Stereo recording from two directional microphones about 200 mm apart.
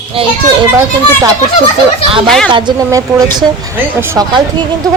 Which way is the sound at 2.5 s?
20° right (ahead or behind).